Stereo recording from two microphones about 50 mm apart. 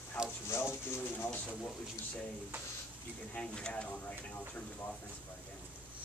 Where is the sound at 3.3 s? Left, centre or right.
Centre.